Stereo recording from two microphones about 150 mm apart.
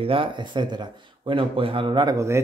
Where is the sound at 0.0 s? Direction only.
35° right (ahead or behind).